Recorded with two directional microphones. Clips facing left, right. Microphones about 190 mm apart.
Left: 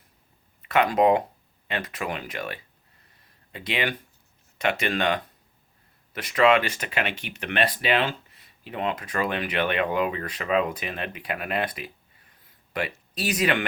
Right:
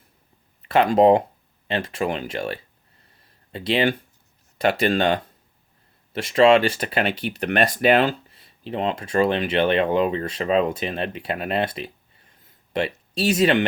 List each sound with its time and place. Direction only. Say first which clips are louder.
0.6 s speech: right 5 dB; 30° right (ahead or behind)
8.3 s speech: right 7 dB; 30° right (ahead or behind)